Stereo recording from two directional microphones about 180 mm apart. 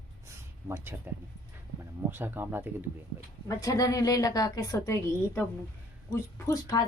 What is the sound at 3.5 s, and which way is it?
A woman's voice, 20° left (ahead or behind).